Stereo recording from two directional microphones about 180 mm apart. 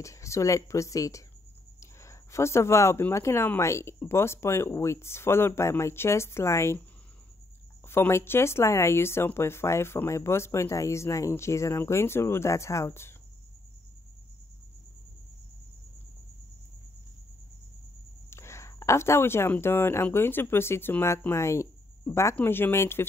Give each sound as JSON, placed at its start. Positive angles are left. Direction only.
{"t": 0.0, "sound": "speech", "side_deg": 15}
{"t": 7.9, "sound": "speech", "side_deg": 15}
{"t": 18.3, "sound": "speech", "side_deg": 15}